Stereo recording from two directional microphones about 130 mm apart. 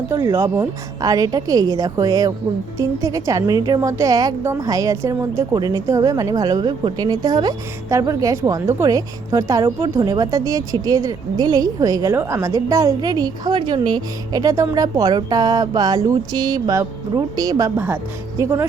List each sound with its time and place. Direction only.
0.1 s a woman's voice: 25° right (ahead or behind)